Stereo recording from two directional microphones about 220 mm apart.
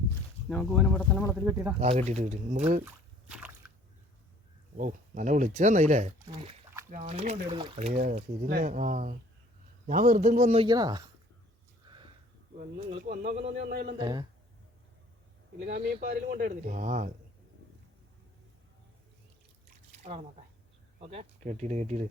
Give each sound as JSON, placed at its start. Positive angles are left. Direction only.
{"t": 0.4, "sound": "speech", "side_deg": 0}
{"t": 1.4, "sound": "speech", "side_deg": -10}
{"t": 1.8, "sound": "speech", "side_deg": -30}
{"t": 2.8, "sound": "drip", "side_deg": -5}
{"t": 4.8, "sound": "speech", "side_deg": -35}
{"t": 11.9, "sound": "sniff", "side_deg": -20}
{"t": 12.5, "sound": "speech", "side_deg": -40}
{"t": 14.0, "sound": "speech", "side_deg": -20}
{"t": 15.5, "sound": "speech", "side_deg": -50}
{"t": 16.0, "sound": "speech", "side_deg": -40}
{"t": 20.0, "sound": "speech", "side_deg": -25}